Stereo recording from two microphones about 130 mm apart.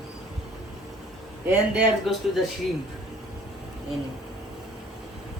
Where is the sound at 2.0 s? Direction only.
Centre (ahead or behind).